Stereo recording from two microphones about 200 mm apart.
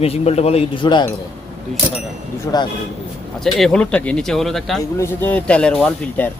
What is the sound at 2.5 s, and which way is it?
Speech, 15° left (ahead or behind).